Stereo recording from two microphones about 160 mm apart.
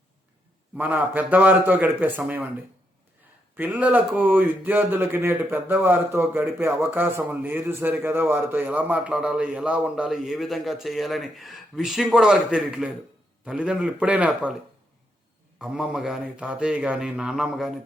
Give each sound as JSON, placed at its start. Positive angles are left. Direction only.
{"t": 0.8, "sound": "speech", "side_deg": -10}
{"t": 3.5, "sound": "speech", "side_deg": -10}
{"t": 15.5, "sound": "a man's voice", "side_deg": -5}